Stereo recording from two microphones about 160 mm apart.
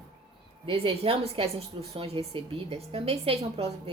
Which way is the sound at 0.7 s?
35° right (ahead or behind).